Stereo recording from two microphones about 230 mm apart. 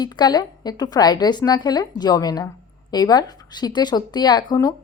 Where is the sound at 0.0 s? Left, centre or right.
Centre.